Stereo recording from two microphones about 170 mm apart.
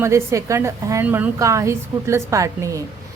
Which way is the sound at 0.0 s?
15° right (ahead or behind).